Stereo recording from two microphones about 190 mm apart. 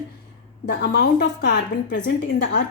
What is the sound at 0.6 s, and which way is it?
A woman's voice, 60° left (ahead or behind).